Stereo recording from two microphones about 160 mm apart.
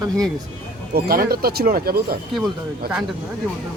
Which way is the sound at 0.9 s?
70° right (ahead or behind).